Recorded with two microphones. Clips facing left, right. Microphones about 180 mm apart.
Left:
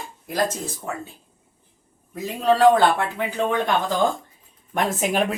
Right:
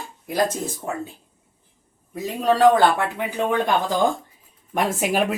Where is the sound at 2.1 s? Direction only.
15° right (ahead or behind).